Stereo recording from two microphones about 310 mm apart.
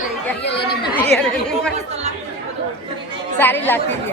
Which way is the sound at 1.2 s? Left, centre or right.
Centre.